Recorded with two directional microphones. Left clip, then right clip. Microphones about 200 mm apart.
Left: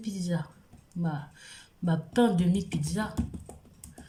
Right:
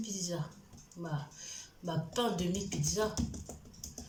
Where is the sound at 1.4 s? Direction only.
50° left (ahead or behind).